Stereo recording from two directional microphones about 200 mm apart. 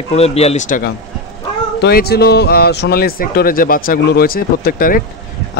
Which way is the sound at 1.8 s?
50° left (ahead or behind).